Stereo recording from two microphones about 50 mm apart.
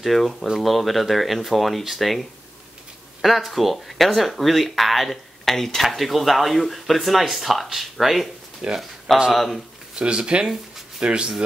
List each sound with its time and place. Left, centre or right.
0.0 s speech: centre
9.9 s speech: centre